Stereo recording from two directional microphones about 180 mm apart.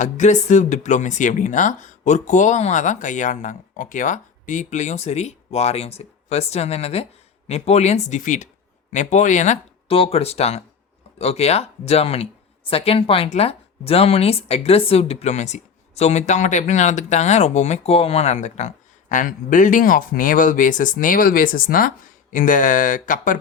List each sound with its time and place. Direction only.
0.0 s speech: 40° left (ahead or behind)